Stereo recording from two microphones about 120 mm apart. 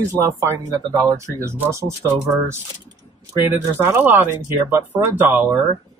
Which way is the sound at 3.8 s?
15° right (ahead or behind).